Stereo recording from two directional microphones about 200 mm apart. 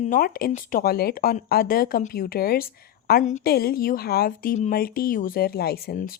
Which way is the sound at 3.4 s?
50° left (ahead or behind).